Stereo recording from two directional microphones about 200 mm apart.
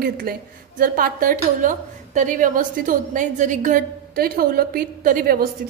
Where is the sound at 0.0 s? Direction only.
50° right (ahead or behind).